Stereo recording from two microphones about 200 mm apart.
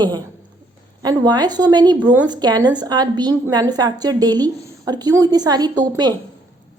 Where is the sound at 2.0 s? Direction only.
10° right (ahead or behind).